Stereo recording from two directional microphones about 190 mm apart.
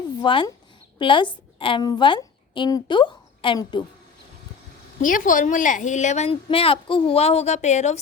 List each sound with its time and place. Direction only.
0.2 s a woman's voice: 25° left (ahead or behind)
4.9 s a woman's voice: 45° left (ahead or behind)